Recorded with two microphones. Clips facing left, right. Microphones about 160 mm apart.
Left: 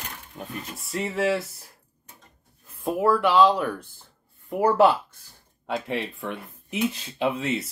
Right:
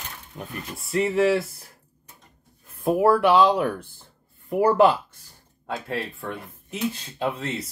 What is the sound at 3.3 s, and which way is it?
Speech, 15° right (ahead or behind).